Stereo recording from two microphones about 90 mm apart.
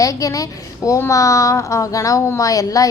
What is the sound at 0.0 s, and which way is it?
Speech, 40° left (ahead or behind).